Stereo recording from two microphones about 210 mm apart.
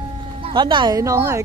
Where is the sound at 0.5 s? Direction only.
20° right (ahead or behind).